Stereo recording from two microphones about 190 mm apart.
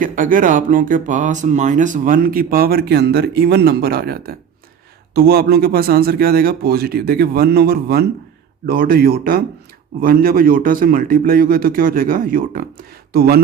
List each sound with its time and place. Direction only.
0.0 s speech: 45° right (ahead or behind)